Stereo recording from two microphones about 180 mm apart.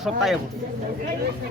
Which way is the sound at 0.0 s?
Centre (ahead or behind).